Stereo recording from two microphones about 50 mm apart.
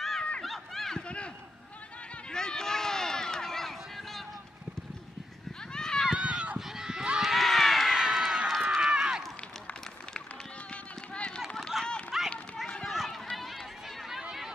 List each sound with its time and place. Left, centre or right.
0.4 s run: centre
1.0 s a sound: left
2.3 s run: centre
5.8 s run: centre
6.1 s run: centre
6.8 s a sound: centre
7.2 s run: centre
8.6 s run: centre
10.7 s run: centre
11.7 s run: centre